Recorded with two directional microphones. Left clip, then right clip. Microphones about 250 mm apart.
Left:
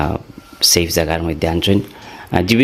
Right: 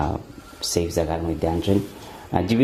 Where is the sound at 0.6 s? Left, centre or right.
Left.